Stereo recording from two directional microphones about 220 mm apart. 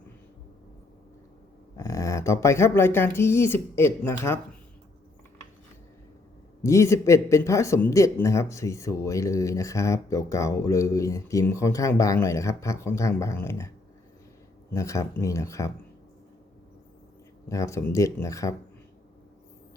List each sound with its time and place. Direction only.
1.7 s speech: 15° left (ahead or behind)
6.6 s speech: 15° left (ahead or behind)
14.7 s speech: 15° left (ahead or behind)
17.5 s speech: 15° left (ahead or behind)